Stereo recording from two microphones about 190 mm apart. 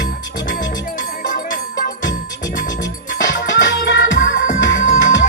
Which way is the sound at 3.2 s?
75° left (ahead or behind).